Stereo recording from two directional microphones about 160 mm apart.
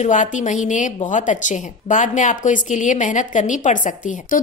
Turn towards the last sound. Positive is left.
turn(degrees=55)  # may be behind; listen again after turning